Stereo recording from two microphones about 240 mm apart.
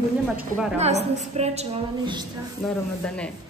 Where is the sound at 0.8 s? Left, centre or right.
Right.